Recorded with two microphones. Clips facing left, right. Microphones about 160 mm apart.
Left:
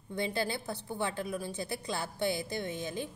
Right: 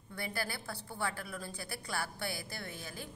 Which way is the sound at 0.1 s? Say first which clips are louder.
Left 7 dB; 20° left (ahead or behind).